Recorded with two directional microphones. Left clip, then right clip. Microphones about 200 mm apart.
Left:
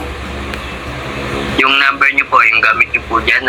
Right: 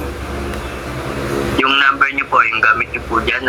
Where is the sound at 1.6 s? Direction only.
30° right (ahead or behind).